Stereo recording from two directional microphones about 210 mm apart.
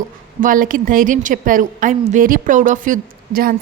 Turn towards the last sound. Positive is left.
turn(degrees=-45)  # may be behind; listen again after turning